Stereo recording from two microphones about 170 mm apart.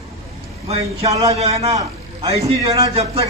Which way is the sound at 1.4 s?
40° right (ahead or behind).